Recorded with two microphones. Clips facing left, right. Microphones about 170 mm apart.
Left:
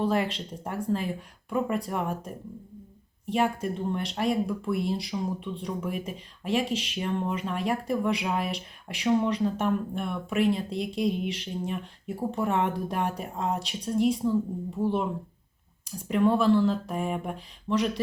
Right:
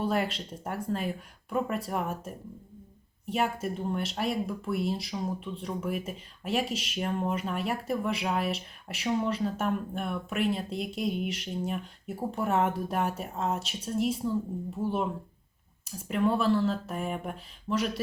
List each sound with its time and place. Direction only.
0.0 s speech: 5° right (ahead or behind)
16.0 s speech: centre (ahead or behind)